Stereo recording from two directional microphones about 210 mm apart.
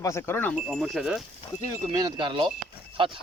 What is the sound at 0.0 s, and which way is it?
Speech, 10° left (ahead or behind).